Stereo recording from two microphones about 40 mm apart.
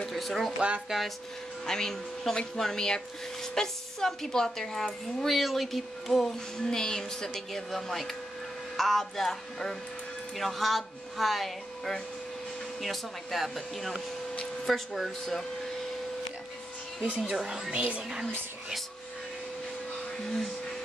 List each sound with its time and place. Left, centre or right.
0.1 s speech: centre
0.6 s speech: right
1.7 s a woman's voice: centre
4.8 s a woman's voice: centre
17.4 s speech: centre
17.6 s speech: right